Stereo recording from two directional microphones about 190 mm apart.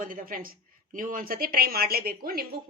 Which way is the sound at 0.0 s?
45° right (ahead or behind).